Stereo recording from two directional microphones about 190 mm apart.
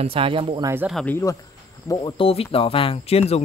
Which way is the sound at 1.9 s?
25° left (ahead or behind).